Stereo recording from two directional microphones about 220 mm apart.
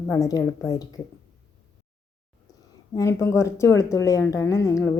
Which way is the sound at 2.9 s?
15° left (ahead or behind).